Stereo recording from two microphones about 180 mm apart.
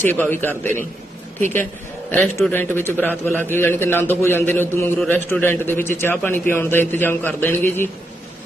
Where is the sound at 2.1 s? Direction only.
10° left (ahead or behind).